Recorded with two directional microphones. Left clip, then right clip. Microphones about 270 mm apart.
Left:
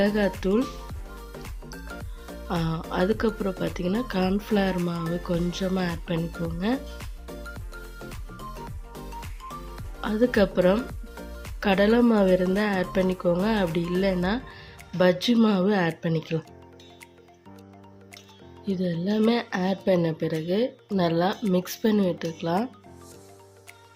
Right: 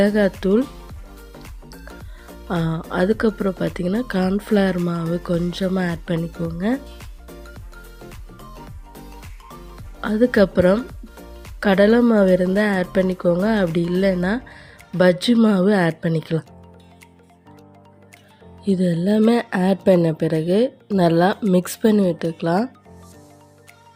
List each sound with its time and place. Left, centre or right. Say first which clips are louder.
0.0 s speech: right 6 dB; centre
1.4 s music: even; centre
2.6 s speech: right 5 dB; centre
7.0 s music: left 1 dB; centre
10.0 s speech: right 6 dB; centre
10.8 s music: right 1 dB; centre
11.6 s speech: right 6 dB; centre
18.6 s speech: right 8 dB; right